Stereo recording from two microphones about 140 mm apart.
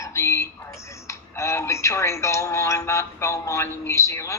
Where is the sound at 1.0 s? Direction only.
20° left (ahead or behind).